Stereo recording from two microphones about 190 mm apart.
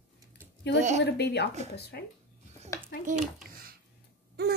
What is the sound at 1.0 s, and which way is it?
Speech, 60° left (ahead or behind).